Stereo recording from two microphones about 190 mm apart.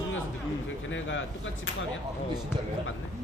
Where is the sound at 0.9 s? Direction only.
85° left.